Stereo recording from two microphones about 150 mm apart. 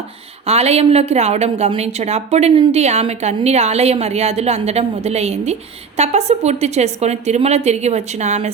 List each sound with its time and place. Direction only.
0.4 s a woman's voice: 45° right (ahead or behind)